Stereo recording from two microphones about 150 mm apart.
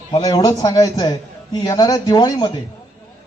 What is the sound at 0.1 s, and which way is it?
A man's voice, 25° left (ahead or behind).